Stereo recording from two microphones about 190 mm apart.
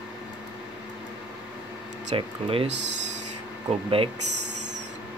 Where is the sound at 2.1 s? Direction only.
30° right (ahead or behind).